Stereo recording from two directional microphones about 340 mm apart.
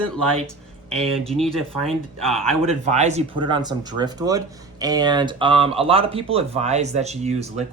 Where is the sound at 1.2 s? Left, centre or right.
Centre.